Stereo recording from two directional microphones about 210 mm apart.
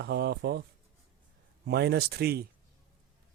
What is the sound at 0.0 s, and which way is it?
Speech, 50° right (ahead or behind).